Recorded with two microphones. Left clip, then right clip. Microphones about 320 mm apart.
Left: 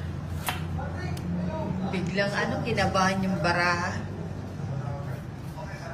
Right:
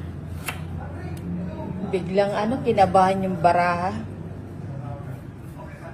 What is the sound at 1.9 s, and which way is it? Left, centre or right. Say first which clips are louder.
A woman's voice: right 8 dB; centre.